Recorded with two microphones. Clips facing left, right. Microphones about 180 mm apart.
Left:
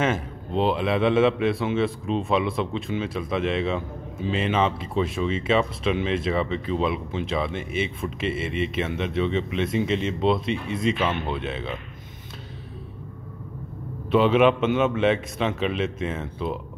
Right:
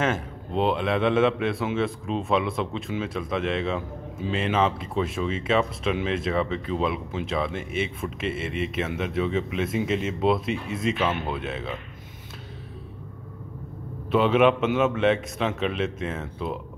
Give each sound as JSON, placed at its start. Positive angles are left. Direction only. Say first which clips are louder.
{"t": 0.0, "sound": "a man's voice", "louder": "left 1 dB", "side_deg": 0}
{"t": 14.1, "sound": "a man's voice", "louder": "left 1 dB", "side_deg": 0}